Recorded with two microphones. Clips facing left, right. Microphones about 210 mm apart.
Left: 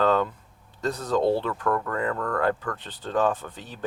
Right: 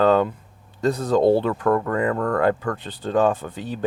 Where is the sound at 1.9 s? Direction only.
10° right (ahead or behind).